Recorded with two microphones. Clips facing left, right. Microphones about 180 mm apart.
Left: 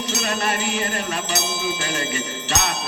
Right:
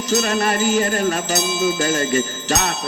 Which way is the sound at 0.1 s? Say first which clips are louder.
Right 7 dB; 40° right (ahead or behind).